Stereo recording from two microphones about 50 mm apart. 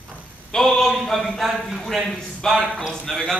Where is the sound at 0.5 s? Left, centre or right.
Centre.